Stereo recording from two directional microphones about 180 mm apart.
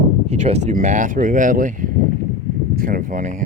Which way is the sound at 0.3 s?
35° right (ahead or behind).